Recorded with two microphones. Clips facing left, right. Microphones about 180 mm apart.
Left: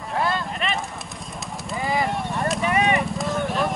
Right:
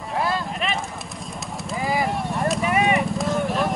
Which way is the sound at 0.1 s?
Centre (ahead or behind).